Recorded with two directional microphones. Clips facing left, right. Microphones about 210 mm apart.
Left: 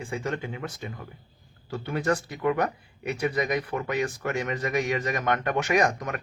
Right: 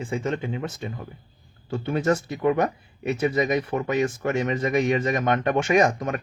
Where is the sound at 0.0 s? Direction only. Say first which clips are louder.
Right 4 dB; 20° right (ahead or behind).